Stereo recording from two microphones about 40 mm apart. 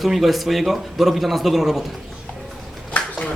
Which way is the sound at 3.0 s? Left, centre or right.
Left.